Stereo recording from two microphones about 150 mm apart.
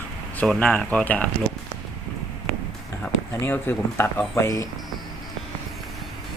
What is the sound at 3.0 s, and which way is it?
Speech, 15° left (ahead or behind).